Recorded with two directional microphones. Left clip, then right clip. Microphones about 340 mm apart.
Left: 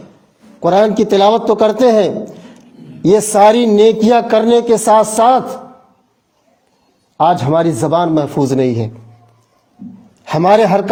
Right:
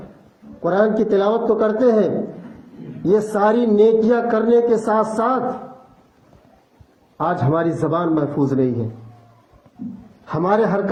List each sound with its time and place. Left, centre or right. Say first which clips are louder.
0.6 s a man's voice: left 6 dB; left
7.2 s a man's voice: left 8 dB; left
10.2 s a man's voice: left 8 dB; left